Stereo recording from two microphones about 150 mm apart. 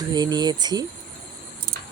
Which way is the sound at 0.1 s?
25° right (ahead or behind).